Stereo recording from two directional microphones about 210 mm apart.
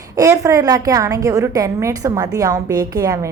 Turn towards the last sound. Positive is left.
turn(degrees=-15)  # may be behind; listen again after turning